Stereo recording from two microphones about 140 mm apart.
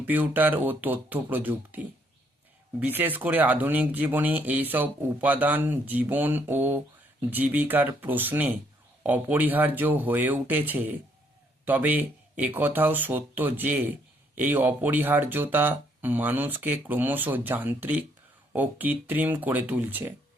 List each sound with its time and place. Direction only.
0.0 s speech: 10° right (ahead or behind)
2.8 s speech: 15° right (ahead or behind)